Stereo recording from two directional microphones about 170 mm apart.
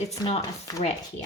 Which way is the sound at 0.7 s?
20° left (ahead or behind).